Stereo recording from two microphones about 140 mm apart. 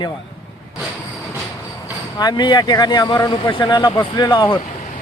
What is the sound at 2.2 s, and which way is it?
Speech, 35° left (ahead or behind).